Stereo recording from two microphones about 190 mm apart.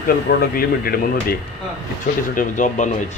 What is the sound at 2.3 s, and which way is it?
Speech, 40° left (ahead or behind).